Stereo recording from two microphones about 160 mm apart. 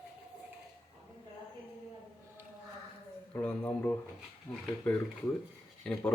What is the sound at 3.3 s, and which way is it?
Speech, 10° left (ahead or behind).